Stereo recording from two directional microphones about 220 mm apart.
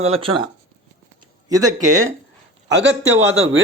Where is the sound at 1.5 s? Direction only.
15° right (ahead or behind).